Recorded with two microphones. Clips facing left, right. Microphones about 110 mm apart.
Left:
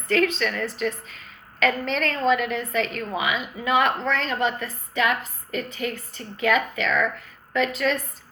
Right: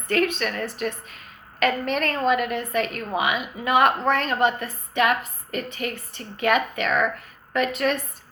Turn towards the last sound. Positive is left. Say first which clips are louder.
# even
turn(degrees=-55)  # may be behind; listen again after turning